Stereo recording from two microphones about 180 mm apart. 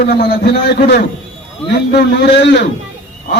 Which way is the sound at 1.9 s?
70° left (ahead or behind).